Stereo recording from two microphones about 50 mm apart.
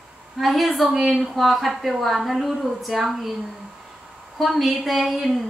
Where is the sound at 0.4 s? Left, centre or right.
Centre.